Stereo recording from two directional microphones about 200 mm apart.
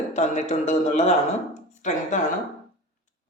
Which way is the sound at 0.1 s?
35° left (ahead or behind).